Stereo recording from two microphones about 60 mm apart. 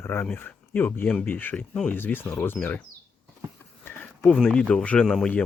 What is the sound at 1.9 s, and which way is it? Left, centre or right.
Speech, left.